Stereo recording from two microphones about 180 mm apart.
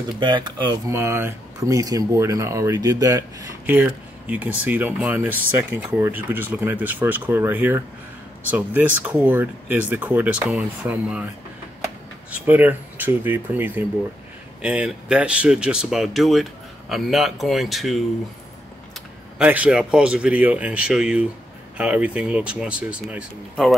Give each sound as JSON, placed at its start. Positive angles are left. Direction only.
{"t": 0.2, "sound": "speech", "side_deg": -25}
{"t": 12.3, "sound": "speech", "side_deg": -10}
{"t": 19.3, "sound": "speech", "side_deg": -10}